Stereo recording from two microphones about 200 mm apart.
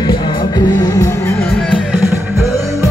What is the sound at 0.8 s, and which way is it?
Music, 15° left (ahead or behind).